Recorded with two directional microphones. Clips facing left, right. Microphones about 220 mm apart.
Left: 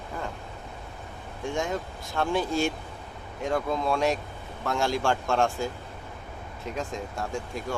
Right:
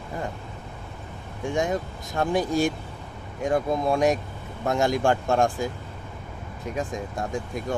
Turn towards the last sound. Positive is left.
turn(degrees=-15)  # may be behind; listen again after turning